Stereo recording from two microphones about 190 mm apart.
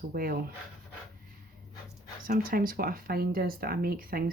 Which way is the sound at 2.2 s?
50° right (ahead or behind).